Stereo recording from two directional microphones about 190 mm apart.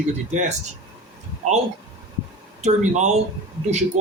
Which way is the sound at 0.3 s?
40° right (ahead or behind).